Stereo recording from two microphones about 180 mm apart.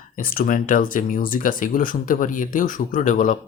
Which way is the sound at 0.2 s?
55° left (ahead or behind).